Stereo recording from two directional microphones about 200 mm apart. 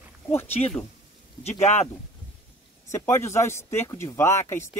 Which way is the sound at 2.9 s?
10° left (ahead or behind).